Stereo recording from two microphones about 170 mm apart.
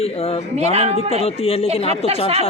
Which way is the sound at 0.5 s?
40° right (ahead or behind).